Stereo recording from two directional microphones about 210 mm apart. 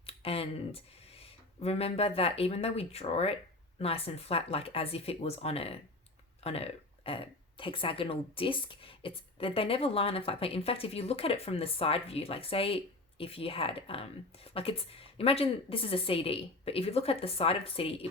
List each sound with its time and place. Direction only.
0.0 s speech: 30° left (ahead or behind)